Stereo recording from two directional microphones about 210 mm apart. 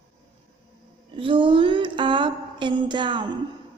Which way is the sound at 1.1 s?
25° right (ahead or behind).